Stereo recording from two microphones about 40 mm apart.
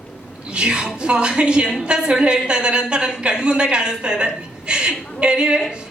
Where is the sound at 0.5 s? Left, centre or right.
Right.